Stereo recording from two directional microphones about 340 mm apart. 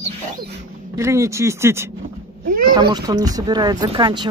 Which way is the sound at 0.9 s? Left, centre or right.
Centre.